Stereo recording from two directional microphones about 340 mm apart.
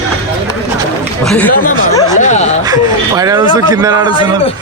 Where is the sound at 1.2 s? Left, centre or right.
Centre.